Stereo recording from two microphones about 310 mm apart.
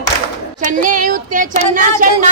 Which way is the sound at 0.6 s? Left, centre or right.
Right.